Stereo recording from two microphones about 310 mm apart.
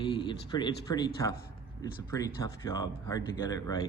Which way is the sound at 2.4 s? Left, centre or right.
Centre.